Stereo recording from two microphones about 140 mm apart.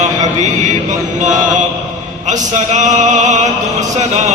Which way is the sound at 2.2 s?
60° right (ahead or behind).